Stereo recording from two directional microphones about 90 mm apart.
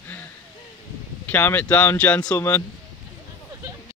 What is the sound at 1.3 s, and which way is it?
Speech, 20° left (ahead or behind).